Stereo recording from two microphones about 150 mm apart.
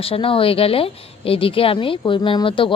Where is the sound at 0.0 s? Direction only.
40° left (ahead or behind).